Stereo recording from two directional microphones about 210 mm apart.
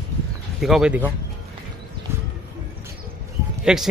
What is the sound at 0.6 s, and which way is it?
Speech, centre (ahead or behind).